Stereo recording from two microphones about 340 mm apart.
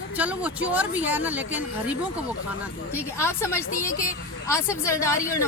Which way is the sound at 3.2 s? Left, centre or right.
Centre.